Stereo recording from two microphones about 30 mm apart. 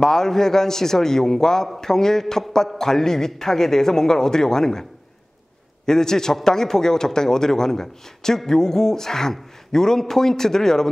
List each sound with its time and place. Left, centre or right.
0.0 s speech: centre
5.9 s speech: centre